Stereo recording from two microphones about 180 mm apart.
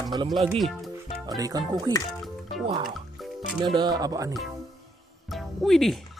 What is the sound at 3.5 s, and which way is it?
Speech, 25° right (ahead or behind).